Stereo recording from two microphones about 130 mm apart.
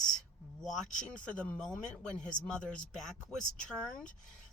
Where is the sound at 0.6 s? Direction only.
Centre (ahead or behind).